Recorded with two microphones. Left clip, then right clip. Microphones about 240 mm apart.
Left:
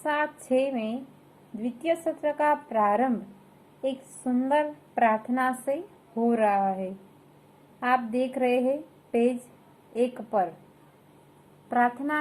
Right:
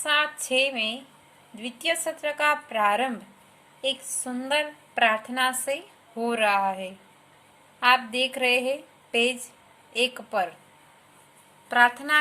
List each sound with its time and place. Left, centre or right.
0.0 s a woman's voice: right
4.2 s a woman's voice: right
11.7 s a woman's voice: right